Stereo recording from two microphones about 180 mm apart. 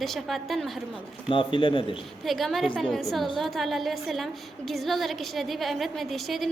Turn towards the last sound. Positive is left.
turn(degrees=0)  # may be behind; listen again after turning